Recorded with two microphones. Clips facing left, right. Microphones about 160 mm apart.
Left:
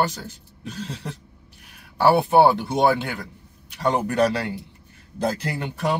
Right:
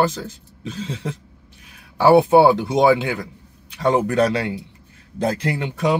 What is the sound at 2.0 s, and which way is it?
Speech, 90° right.